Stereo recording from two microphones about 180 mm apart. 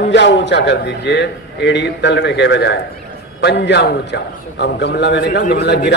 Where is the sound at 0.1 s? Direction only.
75° left (ahead or behind).